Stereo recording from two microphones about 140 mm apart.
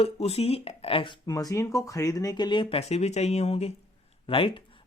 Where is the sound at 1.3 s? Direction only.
25° left (ahead or behind).